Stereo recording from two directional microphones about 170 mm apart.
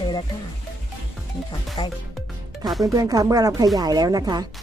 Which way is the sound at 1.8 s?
25° left (ahead or behind).